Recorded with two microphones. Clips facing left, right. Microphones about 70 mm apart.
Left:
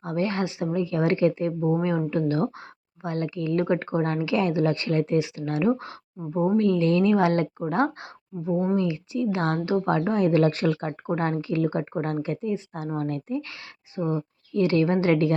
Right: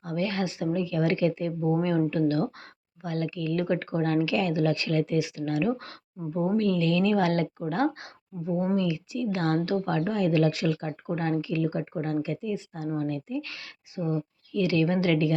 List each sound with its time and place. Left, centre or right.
0.0 s a woman's voice: left